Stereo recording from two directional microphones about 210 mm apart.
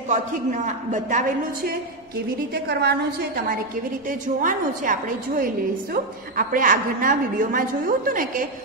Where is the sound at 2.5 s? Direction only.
50° right (ahead or behind).